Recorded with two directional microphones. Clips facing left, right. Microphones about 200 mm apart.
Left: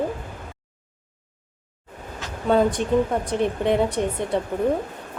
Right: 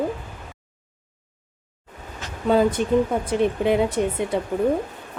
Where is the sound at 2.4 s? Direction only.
Centre (ahead or behind).